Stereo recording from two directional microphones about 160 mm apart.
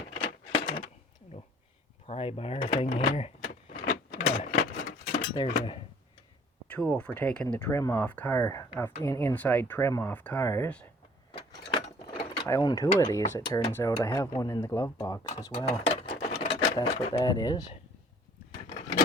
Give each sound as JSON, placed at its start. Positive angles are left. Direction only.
{"t": 0.2, "sound": "a sound", "side_deg": 30}
{"t": 2.0, "sound": "speech", "side_deg": 35}
{"t": 3.8, "sound": "power windows", "side_deg": 45}
{"t": 4.4, "sound": "a sound", "side_deg": 70}
{"t": 5.4, "sound": "speech", "side_deg": 30}
{"t": 6.7, "sound": "speech", "side_deg": 5}
{"t": 11.7, "sound": "gears", "side_deg": 35}
{"t": 12.5, "sound": "speech", "side_deg": 20}
{"t": 15.5, "sound": "a sound", "side_deg": 40}
{"t": 16.4, "sound": "sewing machine", "side_deg": 35}
{"t": 16.9, "sound": "speech", "side_deg": 35}
{"t": 17.2, "sound": "speech", "side_deg": 25}